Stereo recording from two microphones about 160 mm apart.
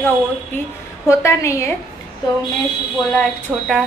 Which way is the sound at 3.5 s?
5° right (ahead or behind).